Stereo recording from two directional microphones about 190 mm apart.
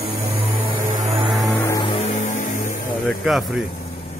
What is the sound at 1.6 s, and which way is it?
Music, 15° left (ahead or behind).